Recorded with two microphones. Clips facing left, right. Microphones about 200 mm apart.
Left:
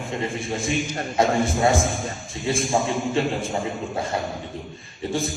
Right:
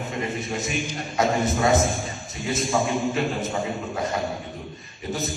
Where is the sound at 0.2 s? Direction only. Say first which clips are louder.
Even; 30° left (ahead or behind).